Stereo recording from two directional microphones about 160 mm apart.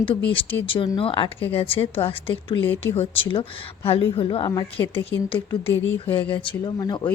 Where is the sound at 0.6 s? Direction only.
35° left (ahead or behind).